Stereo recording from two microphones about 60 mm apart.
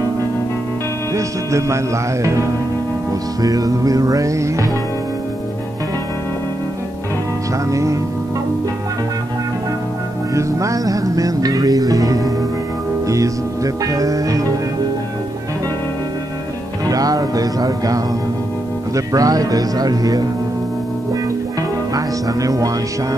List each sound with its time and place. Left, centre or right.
1.1 s speech: right
3.4 s music: right
7.7 s speech: right
10.3 s music: right
13.0 s music: right
16.9 s speech: right
21.9 s speech: right